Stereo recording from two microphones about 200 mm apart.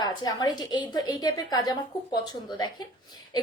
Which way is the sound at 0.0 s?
20° left (ahead or behind).